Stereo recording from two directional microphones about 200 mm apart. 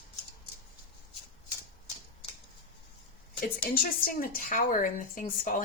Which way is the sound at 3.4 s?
45° left (ahead or behind).